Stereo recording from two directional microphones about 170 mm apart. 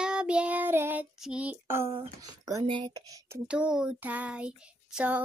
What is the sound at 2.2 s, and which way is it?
Speech, 20° right (ahead or behind).